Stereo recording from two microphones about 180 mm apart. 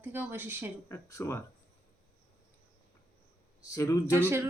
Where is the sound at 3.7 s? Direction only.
15° left (ahead or behind).